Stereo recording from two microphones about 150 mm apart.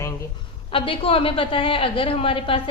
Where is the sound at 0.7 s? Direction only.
35° left (ahead or behind).